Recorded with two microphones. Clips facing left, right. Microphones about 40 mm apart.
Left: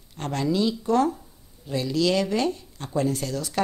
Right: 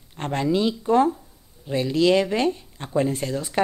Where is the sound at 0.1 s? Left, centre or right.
Right.